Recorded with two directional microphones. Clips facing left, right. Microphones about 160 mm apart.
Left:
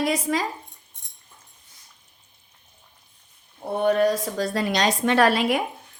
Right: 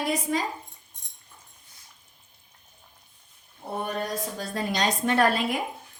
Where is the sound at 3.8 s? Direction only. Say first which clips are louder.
Left 13 dB; 90° left.